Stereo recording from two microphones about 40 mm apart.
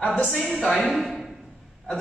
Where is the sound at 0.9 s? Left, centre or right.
Centre.